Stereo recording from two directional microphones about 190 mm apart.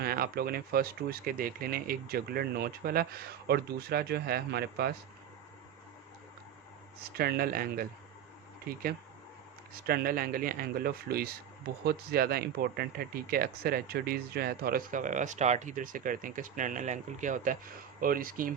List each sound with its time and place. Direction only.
0.0 s speech: 55° right (ahead or behind)
7.2 s speech: 55° right (ahead or behind)
9.8 s speech: 50° right (ahead or behind)